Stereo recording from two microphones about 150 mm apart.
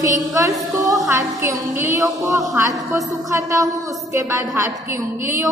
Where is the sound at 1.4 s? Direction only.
20° right (ahead or behind).